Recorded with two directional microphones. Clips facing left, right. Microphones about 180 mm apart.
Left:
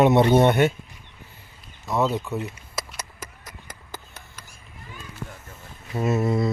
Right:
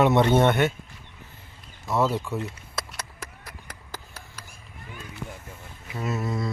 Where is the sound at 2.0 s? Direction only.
Centre (ahead or behind).